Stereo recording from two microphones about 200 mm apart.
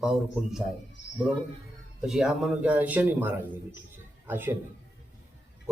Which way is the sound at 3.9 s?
10° right (ahead or behind).